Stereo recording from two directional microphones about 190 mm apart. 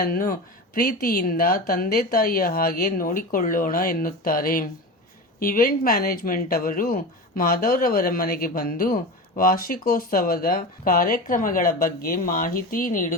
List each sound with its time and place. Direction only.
0.0 s speech: 50° left (ahead or behind)